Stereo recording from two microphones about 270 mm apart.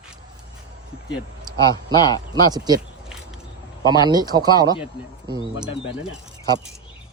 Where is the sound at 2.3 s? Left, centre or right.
Centre.